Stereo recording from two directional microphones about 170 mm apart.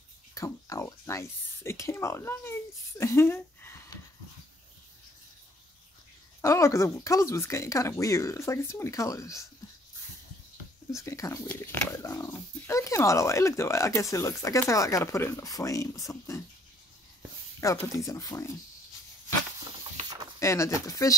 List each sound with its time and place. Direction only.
0.3 s speech: 20° left (ahead or behind)
6.4 s speech: 15° left (ahead or behind)
10.9 s speech: 15° left (ahead or behind)
17.6 s speech: 20° left (ahead or behind)
20.3 s speech: 15° left (ahead or behind)